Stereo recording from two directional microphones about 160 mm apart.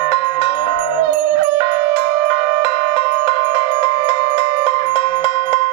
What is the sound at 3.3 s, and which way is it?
Music, 35° left (ahead or behind).